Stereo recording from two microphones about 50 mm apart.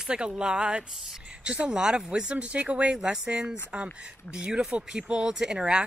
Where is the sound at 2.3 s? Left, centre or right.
Right.